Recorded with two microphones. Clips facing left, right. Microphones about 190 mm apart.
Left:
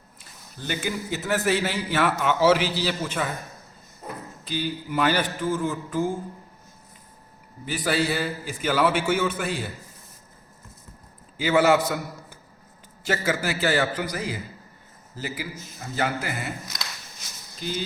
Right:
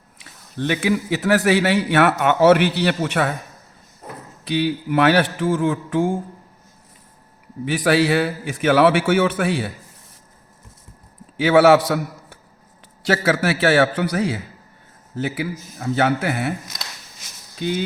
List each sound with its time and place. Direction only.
0.2 s a man's voice: 75° right (ahead or behind)
4.4 s a man's voice: 70° right (ahead or behind); by 6.1 s 90° right
7.6 s a man's voice: 80° right
11.3 s a man's voice: 80° right
17.6 s speech: 65° right (ahead or behind)